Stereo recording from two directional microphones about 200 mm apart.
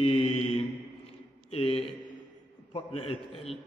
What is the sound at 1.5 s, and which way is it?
A man's voice, 30° left (ahead or behind).